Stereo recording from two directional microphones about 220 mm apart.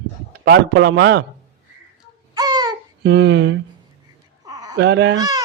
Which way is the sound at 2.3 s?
20° right (ahead or behind).